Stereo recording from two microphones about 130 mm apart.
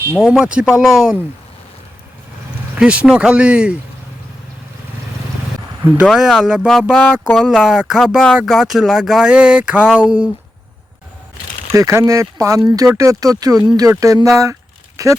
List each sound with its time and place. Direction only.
0.2 s speech: 5° right (ahead or behind)
2.7 s speech: 10° right (ahead or behind)
6.1 s speech: 5° right (ahead or behind)
7.3 s speech: centre (ahead or behind)
11.7 s speech: 20° right (ahead or behind)